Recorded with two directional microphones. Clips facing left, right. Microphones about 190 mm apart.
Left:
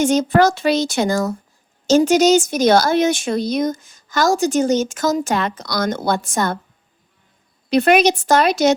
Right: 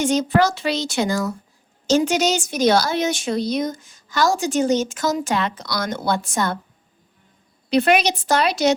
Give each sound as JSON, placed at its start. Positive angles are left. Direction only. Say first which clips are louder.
{"t": 0.0, "sound": "speech", "louder": "left 3 dB", "side_deg": 45}
{"t": 7.7, "sound": "speech", "louder": "left 4 dB", "side_deg": 50}